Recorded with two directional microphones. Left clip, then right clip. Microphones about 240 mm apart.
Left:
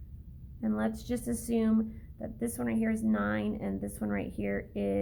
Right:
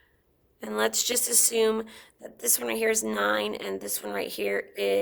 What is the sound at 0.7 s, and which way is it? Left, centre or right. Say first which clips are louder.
A woman's voice: right 8 dB; right.